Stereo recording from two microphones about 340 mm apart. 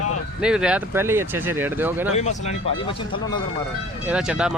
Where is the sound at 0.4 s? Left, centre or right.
Centre.